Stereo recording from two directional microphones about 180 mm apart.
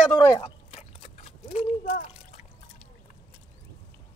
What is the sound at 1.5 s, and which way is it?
Speech, 40° left (ahead or behind).